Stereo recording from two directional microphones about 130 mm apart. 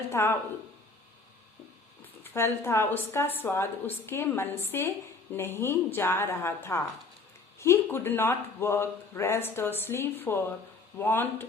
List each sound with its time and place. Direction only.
0.1 s speech: 20° left (ahead or behind)
2.3 s a woman's voice: 20° left (ahead or behind)